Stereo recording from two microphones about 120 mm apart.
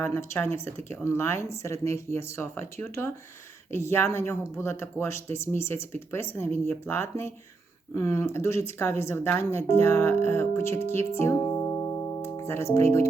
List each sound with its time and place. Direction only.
0.0 s speech: 20° left (ahead or behind)
11.4 s music: 35° left (ahead or behind)
12.2 s speech: 20° left (ahead or behind)